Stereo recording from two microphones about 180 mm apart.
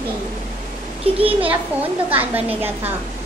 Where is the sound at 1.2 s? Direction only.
30° right (ahead or behind).